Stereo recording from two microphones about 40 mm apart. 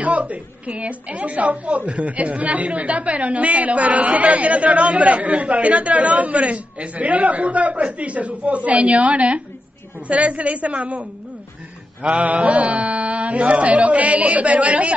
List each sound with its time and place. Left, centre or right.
0.0 s a woman's voice: right
12.0 s mantra: right
12.3 s a woman's voice: right